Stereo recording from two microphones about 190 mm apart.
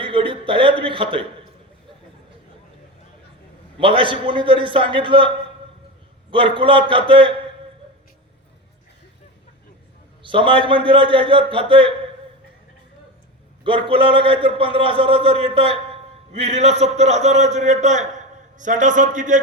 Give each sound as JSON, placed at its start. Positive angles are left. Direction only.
{"t": 0.0, "sound": "a man's voice", "side_deg": -25}
{"t": 3.8, "sound": "a man's voice", "side_deg": -25}
{"t": 6.3, "sound": "a man's voice", "side_deg": -25}
{"t": 10.2, "sound": "a man's voice", "side_deg": -25}
{"t": 13.7, "sound": "a man's voice", "side_deg": -25}